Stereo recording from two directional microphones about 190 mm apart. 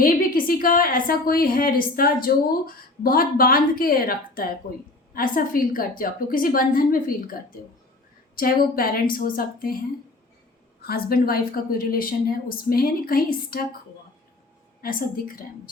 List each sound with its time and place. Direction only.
0.0 s a woman's voice: 45° left (ahead or behind)
8.4 s a woman's voice: 50° left (ahead or behind)
10.8 s a woman's voice: 55° left (ahead or behind)
14.8 s a woman's voice: 50° left (ahead or behind)